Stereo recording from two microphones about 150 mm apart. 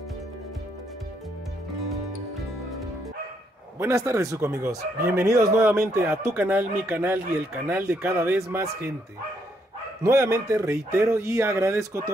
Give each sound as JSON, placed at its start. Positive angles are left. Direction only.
{"t": 3.8, "sound": "speech", "side_deg": -20}
{"t": 10.0, "sound": "speech", "side_deg": -20}